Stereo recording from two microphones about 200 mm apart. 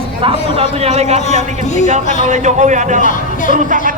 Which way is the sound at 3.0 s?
40° left (ahead or behind).